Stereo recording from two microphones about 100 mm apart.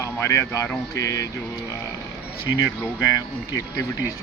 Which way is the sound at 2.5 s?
35° left (ahead or behind).